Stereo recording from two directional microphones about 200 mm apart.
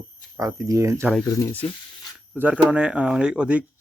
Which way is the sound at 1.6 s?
20° left (ahead or behind).